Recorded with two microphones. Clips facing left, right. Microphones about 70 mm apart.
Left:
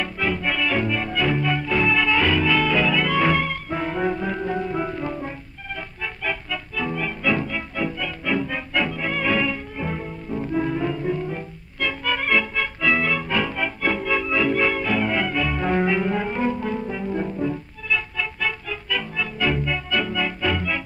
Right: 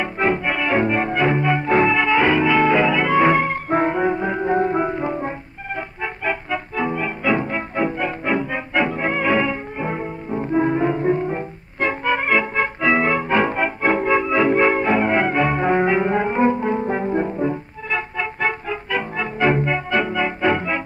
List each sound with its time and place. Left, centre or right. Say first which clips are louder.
0.0 s music: right 4 dB; right
3.9 s music: right 4 dB; right